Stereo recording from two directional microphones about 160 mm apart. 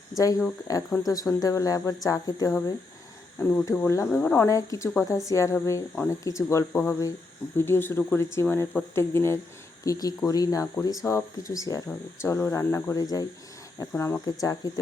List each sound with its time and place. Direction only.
0.1 s speech: 20° left (ahead or behind)